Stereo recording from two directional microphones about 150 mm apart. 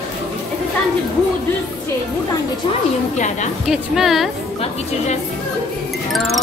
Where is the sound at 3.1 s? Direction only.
50° left (ahead or behind).